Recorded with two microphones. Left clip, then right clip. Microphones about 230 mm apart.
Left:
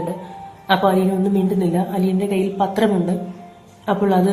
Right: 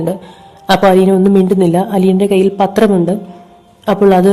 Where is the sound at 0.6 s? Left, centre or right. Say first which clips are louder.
Right 8 dB; right.